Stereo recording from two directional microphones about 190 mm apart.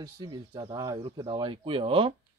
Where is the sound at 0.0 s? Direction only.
20° right (ahead or behind).